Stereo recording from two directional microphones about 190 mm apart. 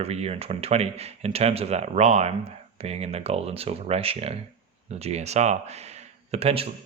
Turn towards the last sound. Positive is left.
turn(degrees=-30)  # may be behind; listen again after turning